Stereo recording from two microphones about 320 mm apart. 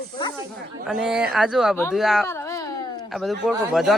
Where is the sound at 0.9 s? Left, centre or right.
Centre.